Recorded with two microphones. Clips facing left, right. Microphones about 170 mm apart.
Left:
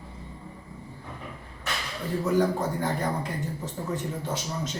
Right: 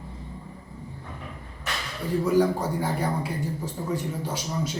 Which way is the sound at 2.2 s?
10° right (ahead or behind).